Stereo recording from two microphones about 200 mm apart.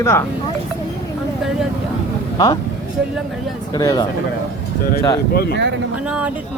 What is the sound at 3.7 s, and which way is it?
Speech, 20° left (ahead or behind).